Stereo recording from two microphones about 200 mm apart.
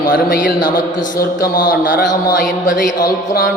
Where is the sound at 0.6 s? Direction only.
20° left (ahead or behind).